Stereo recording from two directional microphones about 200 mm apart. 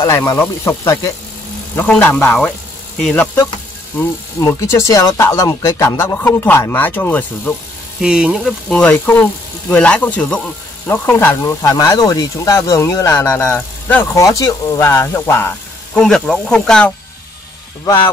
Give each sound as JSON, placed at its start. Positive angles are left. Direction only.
{"t": 0.0, "sound": "speech", "side_deg": 15}
{"t": 8.0, "sound": "speech", "side_deg": -5}